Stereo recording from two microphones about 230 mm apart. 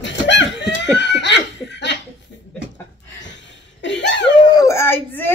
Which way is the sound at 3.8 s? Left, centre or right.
Left.